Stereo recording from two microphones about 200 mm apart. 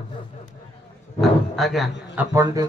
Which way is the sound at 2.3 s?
15° right (ahead or behind).